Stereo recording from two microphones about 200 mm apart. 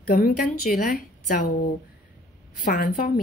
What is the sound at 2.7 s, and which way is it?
Speech, 45° left (ahead or behind).